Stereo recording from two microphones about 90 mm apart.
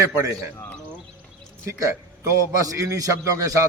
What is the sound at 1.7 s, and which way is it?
A man's voice, 35° right (ahead or behind).